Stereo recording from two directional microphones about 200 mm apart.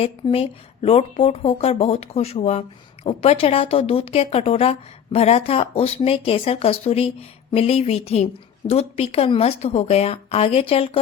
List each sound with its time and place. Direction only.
0.0 s a woman's voice: 30° left (ahead or behind)